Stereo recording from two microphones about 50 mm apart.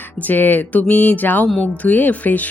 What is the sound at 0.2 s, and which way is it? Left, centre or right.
Speech, left.